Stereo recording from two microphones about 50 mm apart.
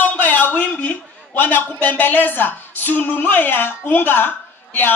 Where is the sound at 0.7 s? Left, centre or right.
Left.